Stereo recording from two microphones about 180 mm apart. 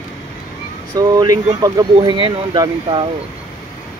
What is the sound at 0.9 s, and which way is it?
Speech, 20° right (ahead or behind).